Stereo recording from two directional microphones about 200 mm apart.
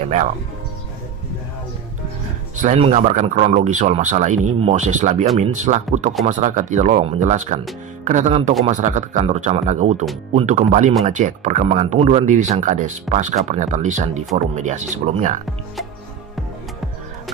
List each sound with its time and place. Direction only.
2.6 s speech: 35° right (ahead or behind)